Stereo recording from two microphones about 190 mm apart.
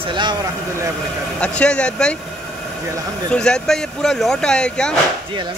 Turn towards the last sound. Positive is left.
turn(degrees=5)  # may be behind; listen again after turning